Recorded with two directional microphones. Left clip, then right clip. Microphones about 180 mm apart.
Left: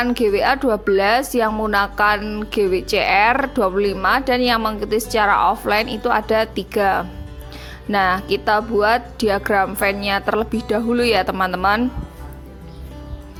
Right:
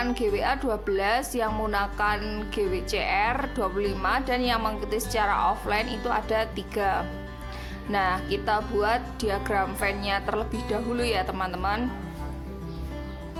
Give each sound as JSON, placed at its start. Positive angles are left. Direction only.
{"t": 0.0, "sound": "a woman's voice", "side_deg": 30}